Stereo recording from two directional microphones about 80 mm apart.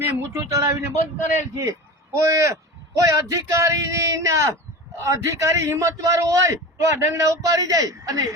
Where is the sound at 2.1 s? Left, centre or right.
Right.